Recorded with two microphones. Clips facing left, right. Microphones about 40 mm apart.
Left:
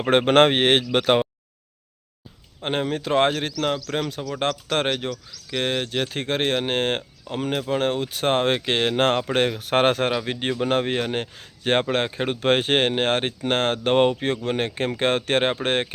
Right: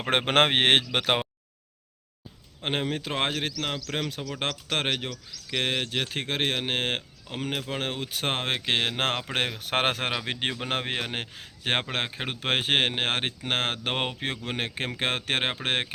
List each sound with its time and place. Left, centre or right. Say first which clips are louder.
0.2 s speech: left 5 dB; centre
0.6 s speech: left 3 dB; right
0.9 s speech: left 6 dB; centre
2.6 s speech: left 4 dB; centre
10.0 s speech: left 5 dB; centre
10.9 s speech: left 6 dB; centre